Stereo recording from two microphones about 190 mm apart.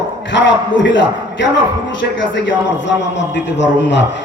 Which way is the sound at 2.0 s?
70° left (ahead or behind).